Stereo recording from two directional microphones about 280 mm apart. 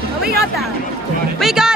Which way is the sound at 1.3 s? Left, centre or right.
Centre.